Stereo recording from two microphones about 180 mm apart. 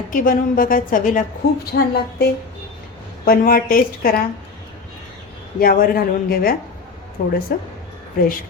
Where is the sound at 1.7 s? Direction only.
65° left (ahead or behind).